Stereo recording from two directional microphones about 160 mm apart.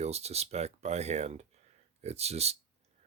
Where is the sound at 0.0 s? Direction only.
40° right (ahead or behind).